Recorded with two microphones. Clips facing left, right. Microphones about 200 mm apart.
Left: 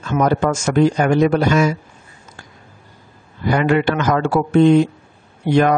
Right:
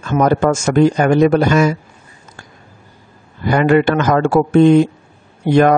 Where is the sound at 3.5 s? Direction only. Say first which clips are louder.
Right 4 dB; 50° right (ahead or behind).